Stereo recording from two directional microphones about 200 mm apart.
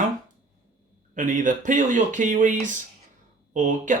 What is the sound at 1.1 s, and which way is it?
Speech, 40° right (ahead or behind).